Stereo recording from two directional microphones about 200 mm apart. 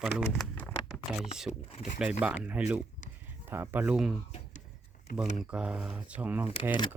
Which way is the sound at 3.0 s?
40° left (ahead or behind).